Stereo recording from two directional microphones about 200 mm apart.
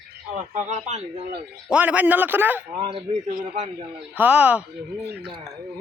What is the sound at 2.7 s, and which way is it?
Speech, 25° right (ahead or behind).